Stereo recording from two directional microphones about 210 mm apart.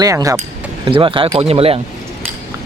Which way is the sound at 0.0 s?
15° right (ahead or behind).